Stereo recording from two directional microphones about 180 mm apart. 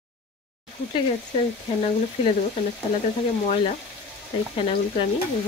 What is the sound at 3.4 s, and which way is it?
Speech, 40° left (ahead or behind).